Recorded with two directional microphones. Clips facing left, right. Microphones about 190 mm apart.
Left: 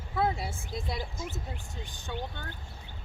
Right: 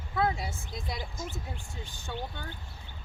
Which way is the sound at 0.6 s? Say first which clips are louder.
Left 3 dB; 5° left (ahead or behind).